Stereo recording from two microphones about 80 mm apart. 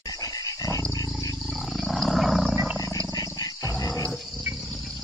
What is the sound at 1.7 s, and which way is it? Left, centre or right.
Wild animals, centre.